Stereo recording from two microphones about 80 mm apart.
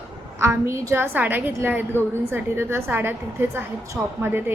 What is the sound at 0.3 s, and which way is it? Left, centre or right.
A woman's voice, right.